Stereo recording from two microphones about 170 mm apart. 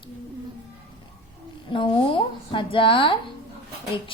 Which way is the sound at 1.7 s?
30° left (ahead or behind).